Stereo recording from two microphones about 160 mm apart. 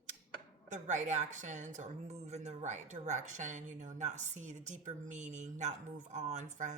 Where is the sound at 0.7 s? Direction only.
50° right (ahead or behind).